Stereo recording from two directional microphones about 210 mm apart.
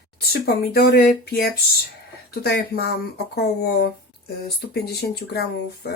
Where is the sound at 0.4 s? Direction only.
50° left (ahead or behind).